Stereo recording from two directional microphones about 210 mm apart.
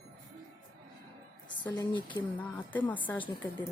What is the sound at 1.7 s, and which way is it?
Speech, 20° left (ahead or behind).